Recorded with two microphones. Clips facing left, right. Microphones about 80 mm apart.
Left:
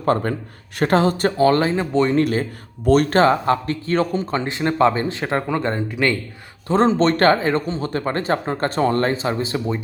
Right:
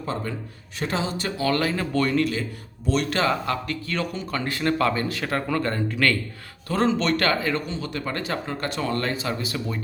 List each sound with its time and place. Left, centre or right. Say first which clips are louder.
0.0 s speech: left 10 dB; left
1.5 s speech: left 3 dB; left
2.1 s speech: left 5 dB; left; by 6.1 s centre
6.7 s speech: left 6 dB; left